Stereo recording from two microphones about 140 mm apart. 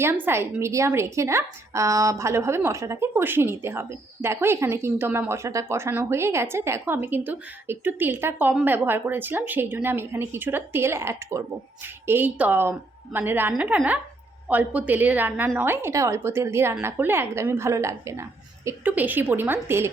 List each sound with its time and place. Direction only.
0.0 s a woman's voice: 15° right (ahead or behind)